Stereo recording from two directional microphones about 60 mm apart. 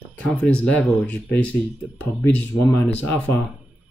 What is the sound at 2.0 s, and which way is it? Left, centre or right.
Speech, left.